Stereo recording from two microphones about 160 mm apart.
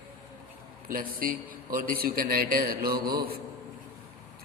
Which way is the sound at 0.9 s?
60° right (ahead or behind).